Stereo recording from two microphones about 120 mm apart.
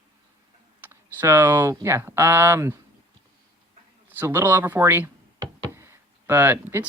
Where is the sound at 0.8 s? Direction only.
15° right (ahead or behind).